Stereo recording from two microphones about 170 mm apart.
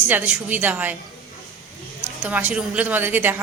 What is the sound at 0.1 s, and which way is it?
Speech, 10° right (ahead or behind).